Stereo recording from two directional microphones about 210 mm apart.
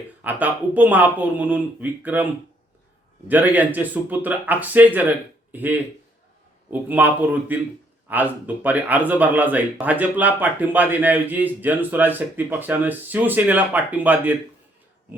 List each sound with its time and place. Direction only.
0.2 s speech: 5° right (ahead or behind)
3.2 s speech: 10° right (ahead or behind)